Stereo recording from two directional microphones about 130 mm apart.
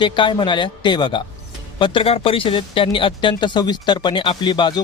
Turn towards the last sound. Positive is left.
turn(degrees=35)  # may be behind; listen again after turning